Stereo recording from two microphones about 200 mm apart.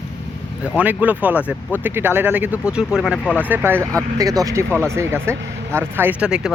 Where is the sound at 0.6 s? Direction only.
5° right (ahead or behind).